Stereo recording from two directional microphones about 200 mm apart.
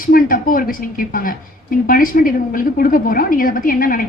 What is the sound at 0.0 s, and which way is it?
A woman's voice, 45° left (ahead or behind).